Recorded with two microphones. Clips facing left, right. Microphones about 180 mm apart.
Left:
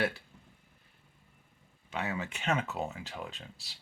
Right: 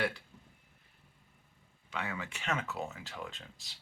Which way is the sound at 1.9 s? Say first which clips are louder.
Left 4 dB; 20° left (ahead or behind).